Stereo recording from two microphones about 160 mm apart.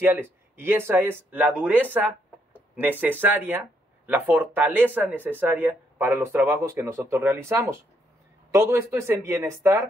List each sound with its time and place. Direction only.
0.0 s speech: 15° right (ahead or behind)